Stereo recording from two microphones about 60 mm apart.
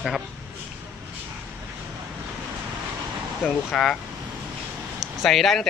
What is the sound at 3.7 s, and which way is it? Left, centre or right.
Speech, centre.